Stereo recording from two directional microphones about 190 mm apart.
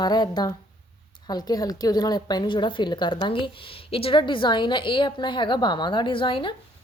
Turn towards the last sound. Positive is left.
turn(degrees=25)  # may be behind; listen again after turning